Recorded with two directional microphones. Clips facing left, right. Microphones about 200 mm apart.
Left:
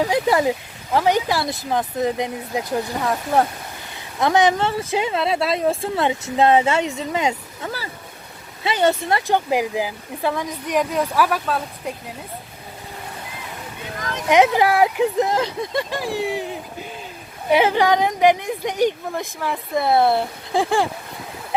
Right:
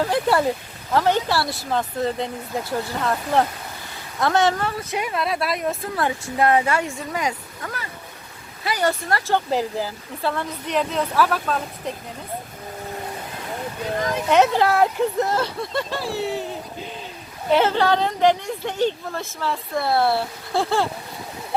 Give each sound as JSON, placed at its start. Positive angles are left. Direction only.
{"t": 0.0, "sound": "speech", "side_deg": 15}
{"t": 14.3, "sound": "speech", "side_deg": 15}